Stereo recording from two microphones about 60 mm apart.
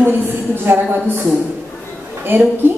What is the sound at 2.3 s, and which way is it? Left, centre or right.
Speech, right.